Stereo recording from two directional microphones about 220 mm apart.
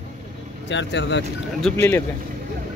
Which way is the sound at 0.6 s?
55° left (ahead or behind).